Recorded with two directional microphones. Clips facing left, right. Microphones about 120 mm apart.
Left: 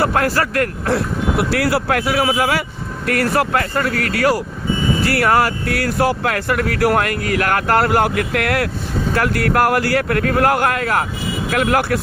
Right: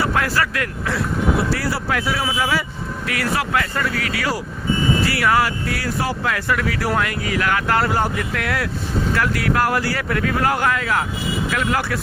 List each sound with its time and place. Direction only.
0.0 s speech: 50° left (ahead or behind)
1.4 s speech: 70° left (ahead or behind)
3.1 s speech: 50° left (ahead or behind)